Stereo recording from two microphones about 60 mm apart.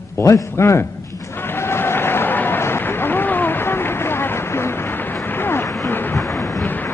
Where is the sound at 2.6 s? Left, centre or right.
Left.